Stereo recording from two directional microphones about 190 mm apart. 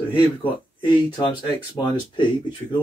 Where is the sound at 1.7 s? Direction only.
25° left (ahead or behind).